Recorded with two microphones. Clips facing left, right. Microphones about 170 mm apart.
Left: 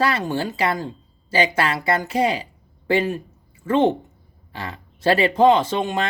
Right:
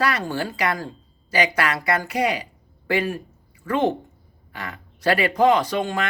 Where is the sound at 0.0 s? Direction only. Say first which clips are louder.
Left 2 dB; 25° left (ahead or behind).